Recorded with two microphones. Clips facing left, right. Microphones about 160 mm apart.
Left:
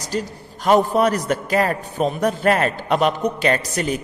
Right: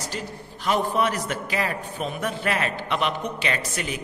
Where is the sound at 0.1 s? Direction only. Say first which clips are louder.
Left 8 dB; 40° left (ahead or behind).